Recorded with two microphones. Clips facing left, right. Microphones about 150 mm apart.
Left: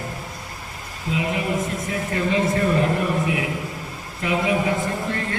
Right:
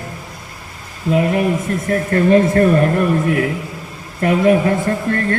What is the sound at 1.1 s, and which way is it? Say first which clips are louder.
A man's voice: right 8 dB; 50° right (ahead or behind).